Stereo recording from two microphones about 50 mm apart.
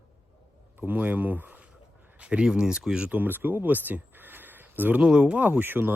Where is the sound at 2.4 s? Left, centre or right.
Centre.